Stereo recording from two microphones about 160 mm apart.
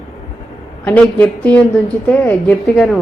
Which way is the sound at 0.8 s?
10° left (ahead or behind).